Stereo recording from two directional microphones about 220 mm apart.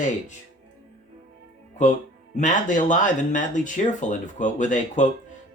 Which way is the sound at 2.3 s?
35° left (ahead or behind).